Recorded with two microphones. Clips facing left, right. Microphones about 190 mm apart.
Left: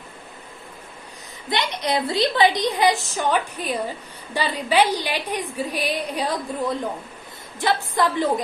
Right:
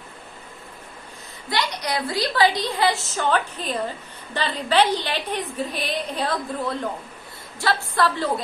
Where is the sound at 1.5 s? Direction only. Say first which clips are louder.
Left 2 dB; 20° left (ahead or behind).